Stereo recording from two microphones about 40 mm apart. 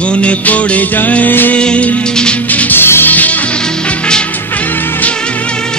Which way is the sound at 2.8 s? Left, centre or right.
Left.